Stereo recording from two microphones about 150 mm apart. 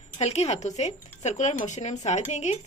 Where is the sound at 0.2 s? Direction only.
45° left (ahead or behind).